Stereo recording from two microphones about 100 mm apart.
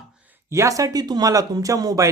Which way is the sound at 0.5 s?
30° right (ahead or behind).